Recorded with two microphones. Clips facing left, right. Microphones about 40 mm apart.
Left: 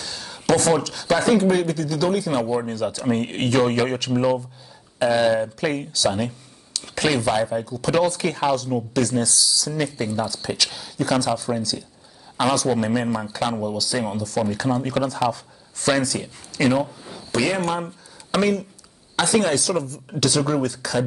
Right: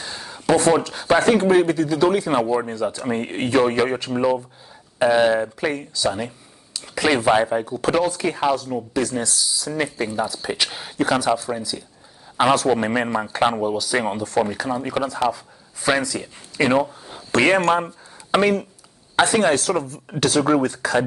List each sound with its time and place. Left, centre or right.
0.0 s a sound: right
0.3 s speech: right
2.4 s speech: centre
2.7 s speech: right
6.8 s a sound: centre
7.2 s speech: right
8.1 s speech: centre
11.1 s speech: centre
12.5 s speech: right
14.6 s speech: centre
16.5 s speech: right
17.3 s speech: right
17.6 s a woman's voice: right